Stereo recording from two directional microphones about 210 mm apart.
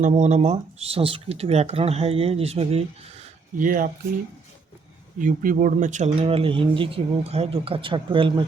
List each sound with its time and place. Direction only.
0.0 s speech: 35° right (ahead or behind)
5.2 s speech: 40° right (ahead or behind); by 8.4 s 25° right (ahead or behind)